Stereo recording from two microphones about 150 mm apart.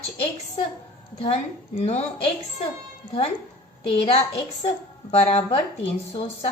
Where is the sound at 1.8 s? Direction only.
45° left (ahead or behind).